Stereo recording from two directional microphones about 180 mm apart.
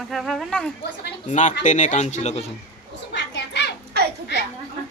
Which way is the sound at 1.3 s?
40° left (ahead or behind).